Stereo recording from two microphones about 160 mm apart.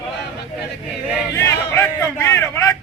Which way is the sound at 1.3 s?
15° left (ahead or behind).